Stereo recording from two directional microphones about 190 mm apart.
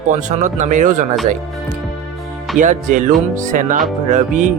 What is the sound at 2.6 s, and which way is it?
Speech, 40° right (ahead or behind).